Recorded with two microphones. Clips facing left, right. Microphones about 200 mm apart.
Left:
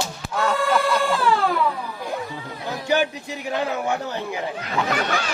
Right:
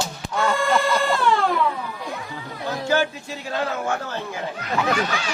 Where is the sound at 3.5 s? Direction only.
15° left (ahead or behind).